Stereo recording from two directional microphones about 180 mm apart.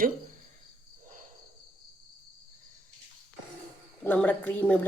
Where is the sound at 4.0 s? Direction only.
5° left (ahead or behind).